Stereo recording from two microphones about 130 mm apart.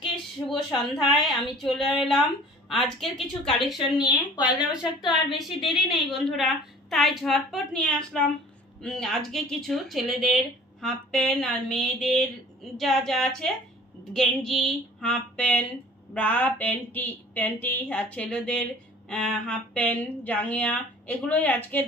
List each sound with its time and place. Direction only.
0.4 s speech: 25° left (ahead or behind)
0.7 s speech: centre (ahead or behind)
5.0 s speech: centre (ahead or behind)